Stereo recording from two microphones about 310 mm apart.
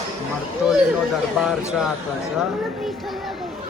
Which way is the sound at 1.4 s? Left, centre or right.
Centre.